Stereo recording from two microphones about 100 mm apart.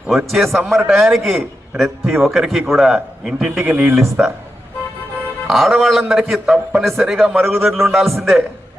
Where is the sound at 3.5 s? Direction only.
20° right (ahead or behind).